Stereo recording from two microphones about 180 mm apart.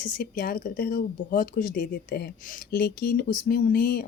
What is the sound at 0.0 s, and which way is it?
A woman's voice, 50° left (ahead or behind).